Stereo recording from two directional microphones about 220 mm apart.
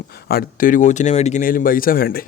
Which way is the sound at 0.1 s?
45° left (ahead or behind).